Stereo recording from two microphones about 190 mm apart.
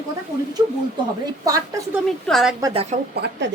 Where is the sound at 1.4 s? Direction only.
20° right (ahead or behind).